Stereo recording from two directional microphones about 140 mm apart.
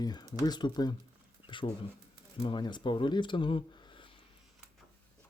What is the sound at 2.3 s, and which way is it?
Speech, 35° left (ahead or behind).